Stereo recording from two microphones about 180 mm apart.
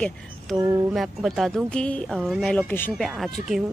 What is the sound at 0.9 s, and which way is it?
Speech, centre (ahead or behind).